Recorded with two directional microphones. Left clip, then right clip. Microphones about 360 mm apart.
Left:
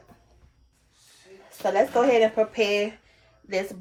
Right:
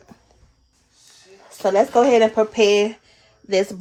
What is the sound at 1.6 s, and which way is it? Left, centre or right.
Speech, right.